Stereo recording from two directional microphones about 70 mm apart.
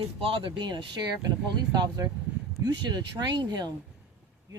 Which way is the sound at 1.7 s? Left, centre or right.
Right.